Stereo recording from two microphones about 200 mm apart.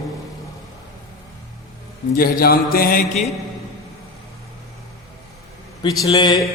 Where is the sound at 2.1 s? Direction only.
50° left (ahead or behind).